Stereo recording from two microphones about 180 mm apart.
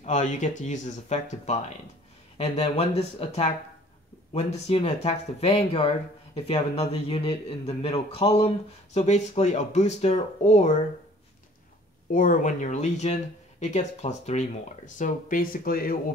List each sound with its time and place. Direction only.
0.0 s speech: 40° left (ahead or behind)
12.1 s speech: 45° left (ahead or behind)